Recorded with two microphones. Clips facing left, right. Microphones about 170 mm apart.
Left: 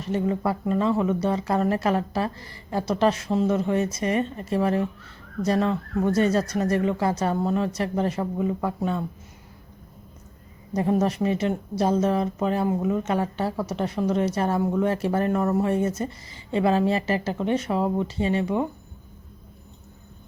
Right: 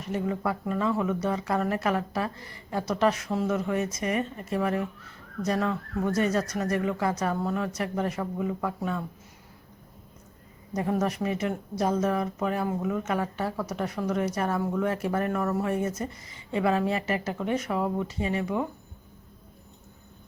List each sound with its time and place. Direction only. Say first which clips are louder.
0.0 s a woman's voice: left 4 dB; 30° left (ahead or behind)
10.8 s a woman's voice: left 5 dB; 25° left (ahead or behind)